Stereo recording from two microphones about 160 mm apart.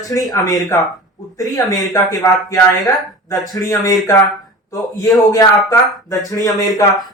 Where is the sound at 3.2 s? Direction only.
20° left (ahead or behind).